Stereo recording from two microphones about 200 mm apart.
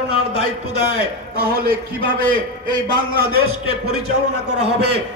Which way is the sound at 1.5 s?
45° right (ahead or behind).